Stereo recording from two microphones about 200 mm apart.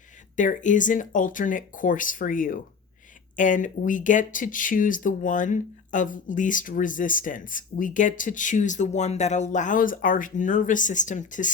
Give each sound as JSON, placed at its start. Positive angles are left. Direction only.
{"t": 0.3, "sound": "speech", "side_deg": 40}